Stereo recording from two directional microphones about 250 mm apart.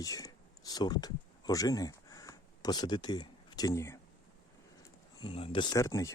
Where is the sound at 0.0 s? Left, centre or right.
Centre.